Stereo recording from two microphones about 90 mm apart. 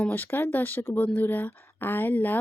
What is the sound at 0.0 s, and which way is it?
Speech, 20° left (ahead or behind).